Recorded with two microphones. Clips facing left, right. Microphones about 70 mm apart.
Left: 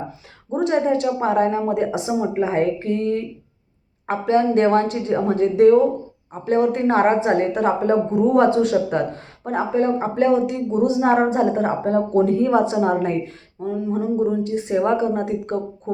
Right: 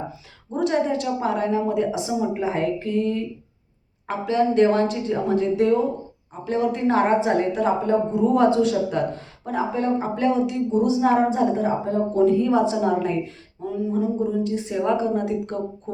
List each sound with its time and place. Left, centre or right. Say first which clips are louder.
0.5 s a woman's voice: left 3 dB; left